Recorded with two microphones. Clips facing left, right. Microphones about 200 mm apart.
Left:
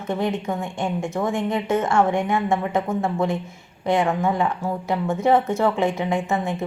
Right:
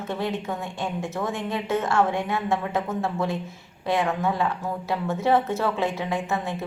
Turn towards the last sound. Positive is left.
turn(degrees=15)  # may be behind; listen again after turning